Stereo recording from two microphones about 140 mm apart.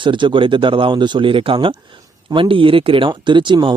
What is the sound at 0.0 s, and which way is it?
Speech, 35° right (ahead or behind).